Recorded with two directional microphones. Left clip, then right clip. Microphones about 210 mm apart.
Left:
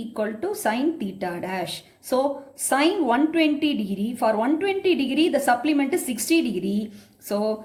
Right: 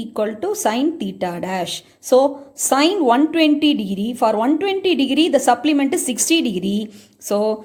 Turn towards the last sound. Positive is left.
turn(degrees=-40)  # may be behind; listen again after turning